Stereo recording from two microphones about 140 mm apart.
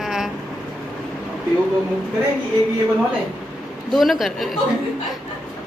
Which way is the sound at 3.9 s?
Centre (ahead or behind).